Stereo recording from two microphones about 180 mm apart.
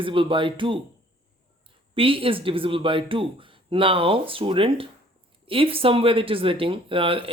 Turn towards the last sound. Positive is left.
turn(degrees=-30)  # may be behind; listen again after turning